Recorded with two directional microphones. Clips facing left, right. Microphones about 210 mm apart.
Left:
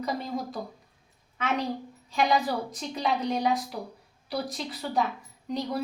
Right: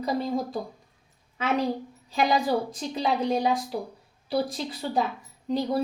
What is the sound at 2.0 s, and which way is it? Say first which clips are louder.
A woman's voice: right 2 dB; 30° right (ahead or behind).